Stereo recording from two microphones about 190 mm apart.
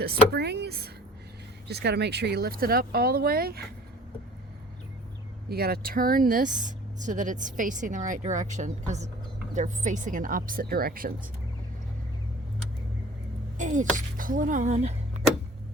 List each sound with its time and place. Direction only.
0.0 s speech: 55° right (ahead or behind)
5.5 s speech: 55° right (ahead or behind)
13.6 s a woman's voice: 40° right (ahead or behind)